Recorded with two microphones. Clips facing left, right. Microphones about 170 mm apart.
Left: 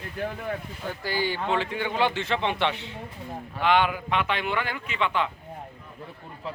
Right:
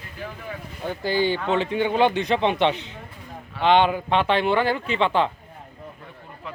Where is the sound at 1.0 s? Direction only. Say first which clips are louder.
Right 6 dB; 20° right (ahead or behind).